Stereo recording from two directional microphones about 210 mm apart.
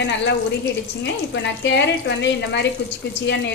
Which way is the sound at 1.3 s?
55° left (ahead or behind).